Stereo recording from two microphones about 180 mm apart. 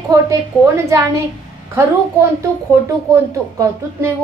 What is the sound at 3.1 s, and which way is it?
A woman's voice, 15° right (ahead or behind).